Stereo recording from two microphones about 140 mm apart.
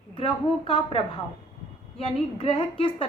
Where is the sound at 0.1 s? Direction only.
40° left (ahead or behind).